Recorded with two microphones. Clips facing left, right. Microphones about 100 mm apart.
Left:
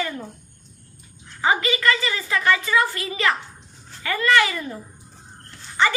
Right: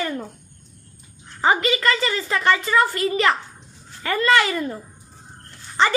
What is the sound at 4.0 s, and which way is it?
Speech, 35° right (ahead or behind).